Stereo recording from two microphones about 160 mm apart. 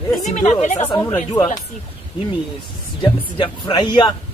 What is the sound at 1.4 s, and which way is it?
Speech, 25° left (ahead or behind).